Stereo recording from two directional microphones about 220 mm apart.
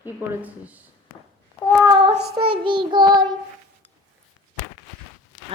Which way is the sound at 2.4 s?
25° right (ahead or behind).